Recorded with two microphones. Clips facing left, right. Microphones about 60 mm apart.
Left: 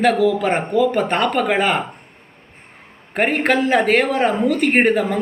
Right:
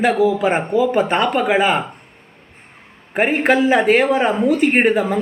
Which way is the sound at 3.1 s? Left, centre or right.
Centre.